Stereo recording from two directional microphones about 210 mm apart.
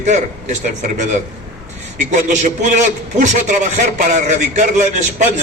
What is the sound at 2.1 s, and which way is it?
A man's voice, 35° right (ahead or behind).